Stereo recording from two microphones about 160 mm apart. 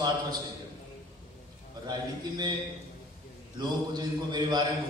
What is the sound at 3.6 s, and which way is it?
A man's voice, 25° right (ahead or behind).